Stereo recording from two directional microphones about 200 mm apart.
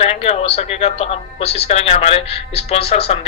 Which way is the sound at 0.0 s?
30° left (ahead or behind).